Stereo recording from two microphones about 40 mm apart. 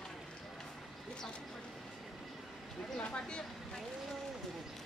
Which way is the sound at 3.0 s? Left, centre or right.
Left.